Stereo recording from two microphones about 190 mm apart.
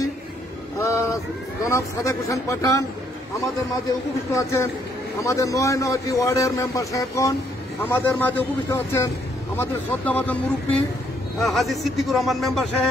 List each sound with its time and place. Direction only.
0.7 s a man's voice: 15° left (ahead or behind)
4.3 s a man's voice: 15° left (ahead or behind)